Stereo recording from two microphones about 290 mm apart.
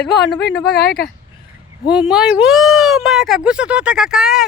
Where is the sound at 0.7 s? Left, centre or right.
Left.